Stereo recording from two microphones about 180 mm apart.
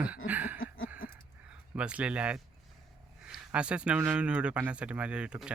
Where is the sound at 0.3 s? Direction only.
10° right (ahead or behind).